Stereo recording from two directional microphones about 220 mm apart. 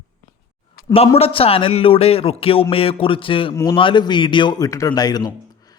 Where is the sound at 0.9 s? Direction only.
25° left (ahead or behind).